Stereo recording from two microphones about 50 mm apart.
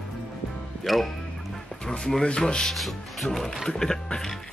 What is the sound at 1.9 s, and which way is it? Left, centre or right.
Speech, centre.